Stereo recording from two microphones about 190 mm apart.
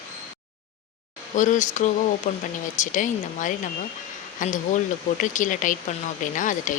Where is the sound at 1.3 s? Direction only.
40° left (ahead or behind).